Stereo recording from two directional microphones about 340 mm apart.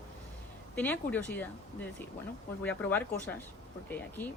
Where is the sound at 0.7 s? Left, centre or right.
Centre.